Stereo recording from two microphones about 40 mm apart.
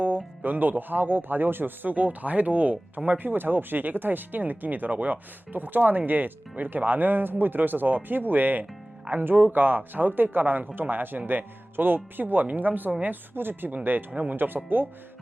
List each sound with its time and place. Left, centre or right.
0.4 s a woman's voice: right
13.3 s speech: right